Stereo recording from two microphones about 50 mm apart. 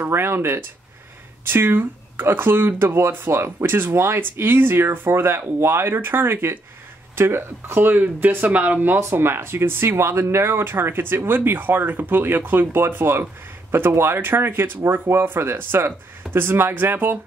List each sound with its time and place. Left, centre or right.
0.0 s speech: right
3.6 s speech: right
4.2 s speech: right
5.9 s speech: right
7.9 s speech: right
10.6 s speech: right